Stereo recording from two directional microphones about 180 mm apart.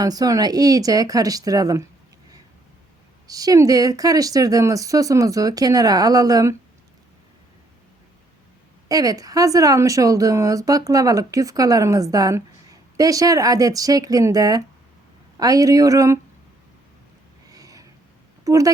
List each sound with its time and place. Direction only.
0.0 s speech: 20° right (ahead or behind)
3.2 s speech: 20° right (ahead or behind)
8.9 s speech: 20° right (ahead or behind)
17.5 s a sound: 20° right (ahead or behind)
18.4 s a woman's voice: 20° right (ahead or behind)